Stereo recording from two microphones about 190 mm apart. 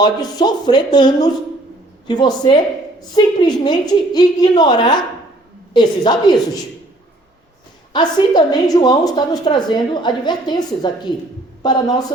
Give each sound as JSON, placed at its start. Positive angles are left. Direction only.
{"t": 0.0, "sound": "a woman's voice", "side_deg": 20}
{"t": 7.9, "sound": "a woman's voice", "side_deg": 20}